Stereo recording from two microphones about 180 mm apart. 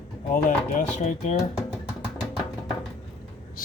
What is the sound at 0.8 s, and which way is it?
Speech, 40° left (ahead or behind).